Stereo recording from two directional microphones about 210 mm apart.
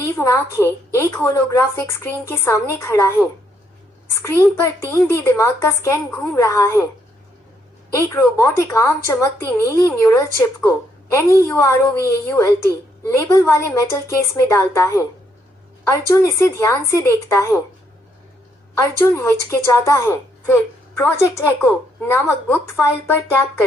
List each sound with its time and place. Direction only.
0.0 s a woman's voice: 15° left (ahead or behind)
4.9 s a woman's voice: 10° left (ahead or behind)
7.9 s a woman's voice: 10° left (ahead or behind)
18.8 s a woman's voice: 15° left (ahead or behind)